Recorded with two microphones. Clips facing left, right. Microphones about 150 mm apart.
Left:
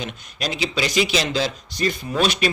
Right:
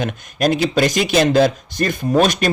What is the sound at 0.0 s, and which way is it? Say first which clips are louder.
Speech: right 10 dB; 50° right (ahead or behind).